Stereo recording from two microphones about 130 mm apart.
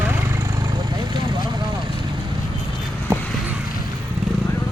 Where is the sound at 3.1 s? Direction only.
20° right (ahead or behind).